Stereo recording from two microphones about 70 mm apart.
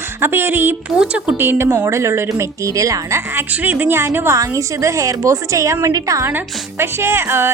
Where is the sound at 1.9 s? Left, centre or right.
Right.